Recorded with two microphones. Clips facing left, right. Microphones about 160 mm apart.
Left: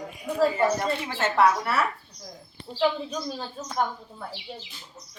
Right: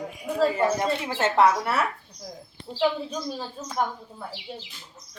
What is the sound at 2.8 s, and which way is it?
Speech, 5° right (ahead or behind).